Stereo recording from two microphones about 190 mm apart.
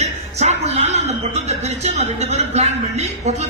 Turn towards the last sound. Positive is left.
turn(degrees=-35)  # may be behind; listen again after turning